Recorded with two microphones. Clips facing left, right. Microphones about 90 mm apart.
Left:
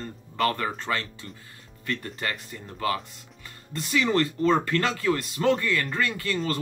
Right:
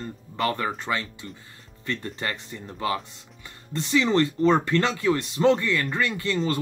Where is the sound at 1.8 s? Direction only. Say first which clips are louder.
Right 1 dB; 25° right (ahead or behind).